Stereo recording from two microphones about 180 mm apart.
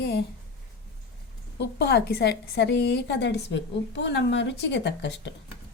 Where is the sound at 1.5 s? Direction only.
70° left (ahead or behind).